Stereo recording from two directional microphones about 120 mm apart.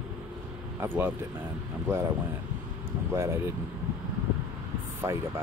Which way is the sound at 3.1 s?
20° right (ahead or behind).